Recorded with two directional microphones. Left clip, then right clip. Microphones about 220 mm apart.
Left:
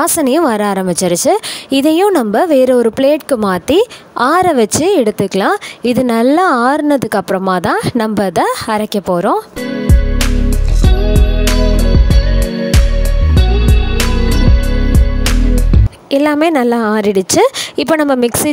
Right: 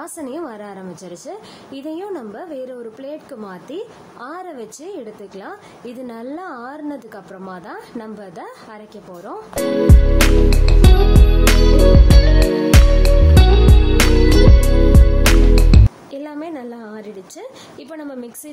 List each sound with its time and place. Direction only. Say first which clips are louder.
0.0 s a woman's voice: left 17 dB; 45° left (ahead or behind)
9.8 s music: right 2 dB; centre (ahead or behind)
14.9 s music: right 2 dB; centre (ahead or behind)
16.1 s a woman's voice: left 18 dB; 45° left (ahead or behind)